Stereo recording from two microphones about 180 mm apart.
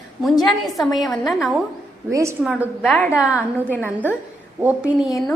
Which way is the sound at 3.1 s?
5° right (ahead or behind).